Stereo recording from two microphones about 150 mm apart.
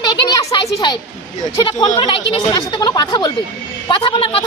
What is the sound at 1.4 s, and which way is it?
A woman's voice, 30° left (ahead or behind).